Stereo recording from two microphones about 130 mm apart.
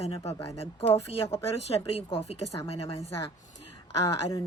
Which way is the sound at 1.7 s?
45° left (ahead or behind).